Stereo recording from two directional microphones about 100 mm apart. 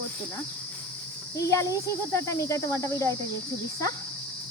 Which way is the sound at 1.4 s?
35° left (ahead or behind).